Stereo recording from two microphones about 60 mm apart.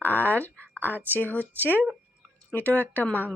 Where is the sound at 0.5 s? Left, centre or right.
Right.